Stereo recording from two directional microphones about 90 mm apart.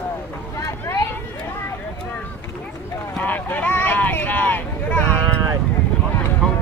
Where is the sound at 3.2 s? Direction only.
20° left (ahead or behind).